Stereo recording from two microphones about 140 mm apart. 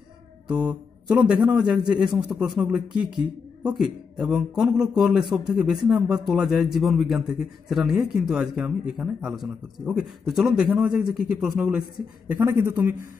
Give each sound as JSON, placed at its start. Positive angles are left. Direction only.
{"t": 0.5, "sound": "speech", "side_deg": -10}
{"t": 12.3, "sound": "speech", "side_deg": -15}